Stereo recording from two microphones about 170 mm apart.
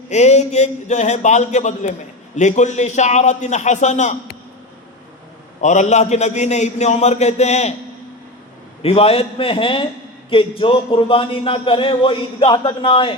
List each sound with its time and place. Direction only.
0.1 s a man's voice: 40° left (ahead or behind)
5.6 s a man's voice: 45° left (ahead or behind)
8.8 s a man's voice: 35° left (ahead or behind)